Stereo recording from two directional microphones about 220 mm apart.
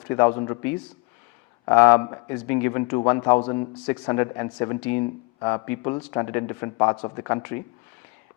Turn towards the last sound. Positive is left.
turn(degrees=20)  # may be behind; listen again after turning